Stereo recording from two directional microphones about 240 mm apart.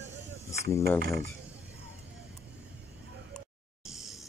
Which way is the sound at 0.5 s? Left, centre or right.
Centre.